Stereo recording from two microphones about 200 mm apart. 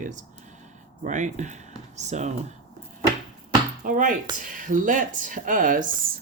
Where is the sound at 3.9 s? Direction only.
40° right (ahead or behind).